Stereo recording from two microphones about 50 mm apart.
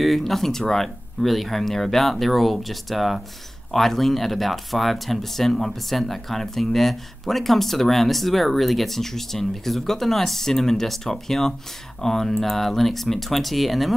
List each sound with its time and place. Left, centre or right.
0.0 s speech: centre